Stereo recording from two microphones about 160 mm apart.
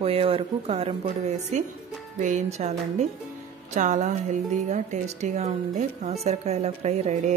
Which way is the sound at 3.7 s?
50° right (ahead or behind).